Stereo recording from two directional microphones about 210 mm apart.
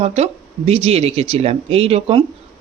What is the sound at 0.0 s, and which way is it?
Speech, 30° right (ahead or behind).